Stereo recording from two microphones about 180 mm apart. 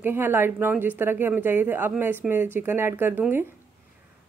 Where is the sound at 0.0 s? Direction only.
10° right (ahead or behind).